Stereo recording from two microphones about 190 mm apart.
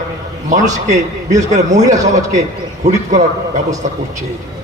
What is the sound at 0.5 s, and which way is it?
A man's voice, 40° right (ahead or behind).